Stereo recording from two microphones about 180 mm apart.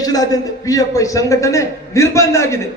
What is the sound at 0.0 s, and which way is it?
A man's voice, 20° left (ahead or behind).